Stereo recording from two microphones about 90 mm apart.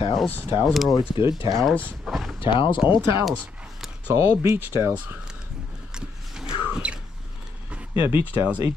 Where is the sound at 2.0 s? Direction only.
5° right (ahead or behind).